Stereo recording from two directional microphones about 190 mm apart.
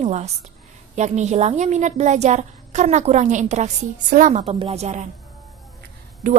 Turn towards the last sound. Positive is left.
turn(degrees=-45)  # may be behind; listen again after turning